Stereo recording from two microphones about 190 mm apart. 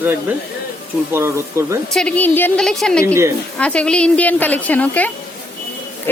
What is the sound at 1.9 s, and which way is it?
A woman's voice, 5° left (ahead or behind).